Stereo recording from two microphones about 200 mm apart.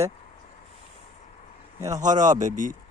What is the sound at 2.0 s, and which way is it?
Speech, 40° right (ahead or behind).